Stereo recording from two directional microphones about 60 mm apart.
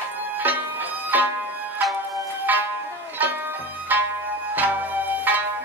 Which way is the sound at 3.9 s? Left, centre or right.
Right.